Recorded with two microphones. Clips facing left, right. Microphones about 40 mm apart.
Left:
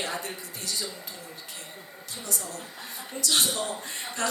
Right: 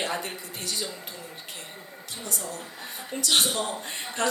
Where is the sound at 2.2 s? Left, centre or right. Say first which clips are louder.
Right 1 dB; right.